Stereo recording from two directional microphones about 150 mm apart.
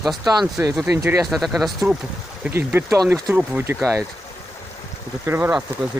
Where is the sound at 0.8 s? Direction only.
15° right (ahead or behind).